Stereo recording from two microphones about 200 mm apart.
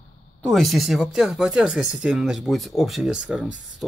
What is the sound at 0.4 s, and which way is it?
Speech, centre (ahead or behind).